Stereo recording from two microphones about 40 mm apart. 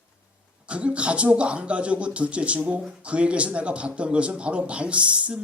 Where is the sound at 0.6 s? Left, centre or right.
Right.